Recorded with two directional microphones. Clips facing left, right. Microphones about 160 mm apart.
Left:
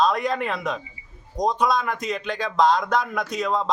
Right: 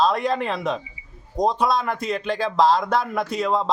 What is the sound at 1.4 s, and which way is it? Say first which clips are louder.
Speech: right 2 dB; 25° right (ahead or behind).